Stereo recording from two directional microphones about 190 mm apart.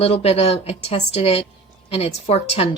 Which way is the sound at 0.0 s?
30° left (ahead or behind).